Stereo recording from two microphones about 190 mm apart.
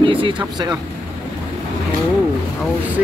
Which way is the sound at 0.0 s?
25° right (ahead or behind).